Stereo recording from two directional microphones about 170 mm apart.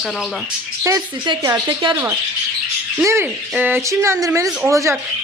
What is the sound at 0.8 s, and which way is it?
Speech, 20° right (ahead or behind).